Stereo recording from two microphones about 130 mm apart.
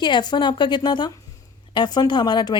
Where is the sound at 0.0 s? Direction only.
35° left (ahead or behind).